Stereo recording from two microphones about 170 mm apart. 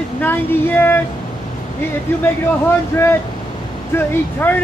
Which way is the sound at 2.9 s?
15° left (ahead or behind).